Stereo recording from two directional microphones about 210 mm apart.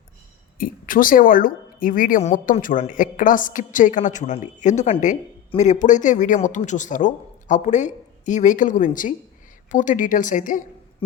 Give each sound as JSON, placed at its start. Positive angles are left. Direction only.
{"t": 0.6, "sound": "speech", "side_deg": 40}